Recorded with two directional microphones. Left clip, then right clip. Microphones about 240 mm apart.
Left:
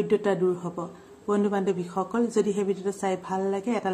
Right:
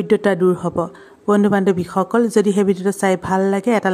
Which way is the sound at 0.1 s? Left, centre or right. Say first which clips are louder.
Right 11 dB; right.